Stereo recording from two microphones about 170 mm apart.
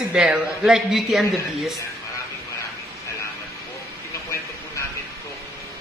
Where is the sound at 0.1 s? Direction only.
5° right (ahead or behind).